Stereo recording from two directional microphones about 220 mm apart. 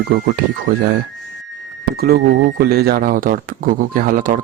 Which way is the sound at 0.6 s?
40° right (ahead or behind).